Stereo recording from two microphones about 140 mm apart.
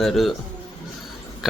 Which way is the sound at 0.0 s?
Centre (ahead or behind).